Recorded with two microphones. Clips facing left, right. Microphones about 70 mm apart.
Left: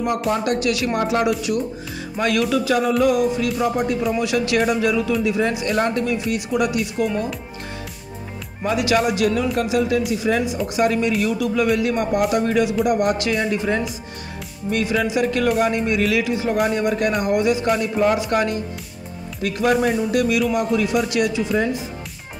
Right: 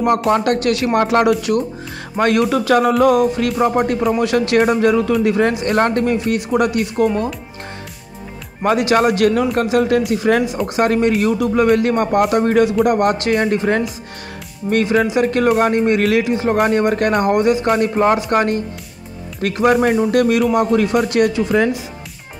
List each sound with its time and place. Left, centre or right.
0.3 s music: right
0.9 s speech: right
2.2 s music: right
8.7 s speech: right
9.0 s music: right
11.3 s speech: right
11.6 s music: right
15.0 s speech: right
16.5 s music: right
17.6 s music: right